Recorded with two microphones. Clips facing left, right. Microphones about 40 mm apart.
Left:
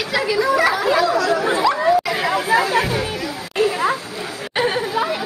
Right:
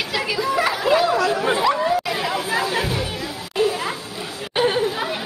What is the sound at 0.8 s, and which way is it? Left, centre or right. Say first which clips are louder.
Chatter: left 1 dB; right.